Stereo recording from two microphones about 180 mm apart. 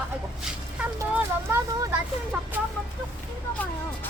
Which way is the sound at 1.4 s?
15° right (ahead or behind).